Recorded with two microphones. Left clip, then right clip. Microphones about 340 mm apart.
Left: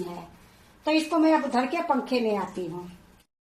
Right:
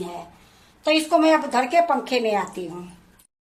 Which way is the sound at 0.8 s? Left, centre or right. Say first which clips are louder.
Right 5 dB; right.